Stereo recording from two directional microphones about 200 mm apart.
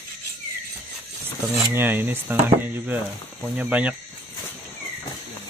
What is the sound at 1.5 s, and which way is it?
Speech, 10° right (ahead or behind).